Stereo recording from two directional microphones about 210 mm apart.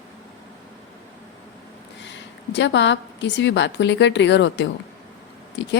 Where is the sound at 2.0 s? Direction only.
60° left (ahead or behind).